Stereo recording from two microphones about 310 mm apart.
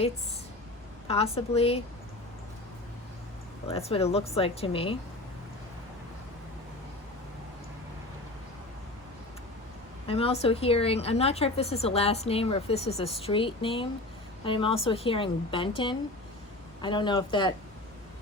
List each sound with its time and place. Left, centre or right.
1.0 s speech: centre
3.7 s a woman's voice: centre
10.1 s a woman's voice: centre